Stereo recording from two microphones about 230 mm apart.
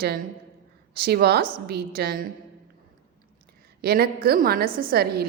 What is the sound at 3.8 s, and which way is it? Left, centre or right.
A woman's voice, right.